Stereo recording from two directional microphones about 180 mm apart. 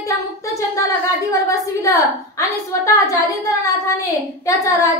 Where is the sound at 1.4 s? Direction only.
15° left (ahead or behind).